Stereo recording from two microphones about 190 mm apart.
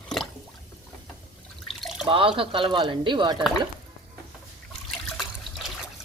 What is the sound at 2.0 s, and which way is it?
Speech, 25° right (ahead or behind).